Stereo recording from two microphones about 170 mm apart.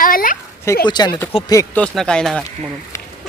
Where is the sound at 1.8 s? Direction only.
5° left (ahead or behind).